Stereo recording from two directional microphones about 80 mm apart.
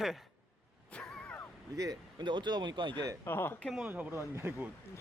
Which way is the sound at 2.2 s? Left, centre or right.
Right.